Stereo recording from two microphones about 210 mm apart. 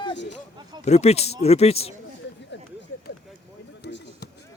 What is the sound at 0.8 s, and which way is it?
Speech, 30° left (ahead or behind).